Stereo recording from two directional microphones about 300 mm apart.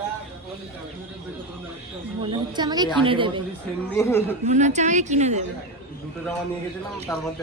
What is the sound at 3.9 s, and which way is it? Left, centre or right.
Speech, centre.